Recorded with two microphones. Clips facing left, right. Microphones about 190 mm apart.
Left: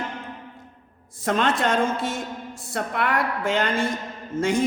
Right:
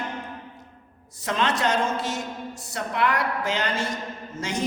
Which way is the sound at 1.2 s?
50° left (ahead or behind).